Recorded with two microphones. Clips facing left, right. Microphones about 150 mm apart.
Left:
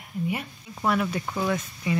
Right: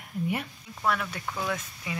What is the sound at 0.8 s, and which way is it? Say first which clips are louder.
Speech: left 4 dB; 15° left (ahead or behind).